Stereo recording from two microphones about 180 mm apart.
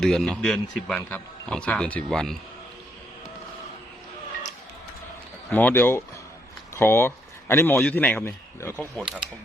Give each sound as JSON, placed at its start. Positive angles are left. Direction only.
{"t": 0.0, "sound": "speech", "side_deg": 0}
{"t": 5.5, "sound": "a man's voice", "side_deg": 10}